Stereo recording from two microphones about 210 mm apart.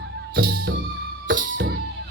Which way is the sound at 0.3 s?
45° right (ahead or behind).